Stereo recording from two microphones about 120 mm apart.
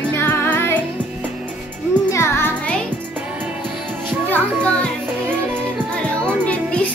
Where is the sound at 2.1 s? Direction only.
20° left (ahead or behind).